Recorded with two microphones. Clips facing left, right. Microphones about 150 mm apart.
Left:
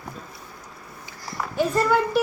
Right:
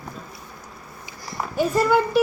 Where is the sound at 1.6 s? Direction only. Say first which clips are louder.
Right 2 dB; 5° right (ahead or behind).